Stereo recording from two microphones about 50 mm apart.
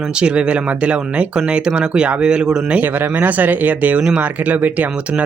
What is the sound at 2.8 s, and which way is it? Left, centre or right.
Speech, right.